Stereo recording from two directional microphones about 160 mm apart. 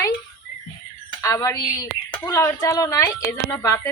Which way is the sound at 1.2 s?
20° left (ahead or behind).